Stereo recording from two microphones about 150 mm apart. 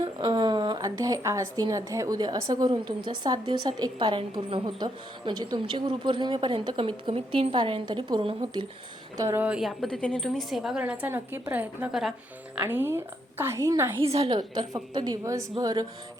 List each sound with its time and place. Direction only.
0.0 s a woman's voice: 30° right (ahead or behind)
9.1 s a woman's voice: 15° right (ahead or behind)
12.5 s a woman's voice: 15° right (ahead or behind)
14.0 s a woman's voice: 40° right (ahead or behind); by 15.9 s 25° right (ahead or behind)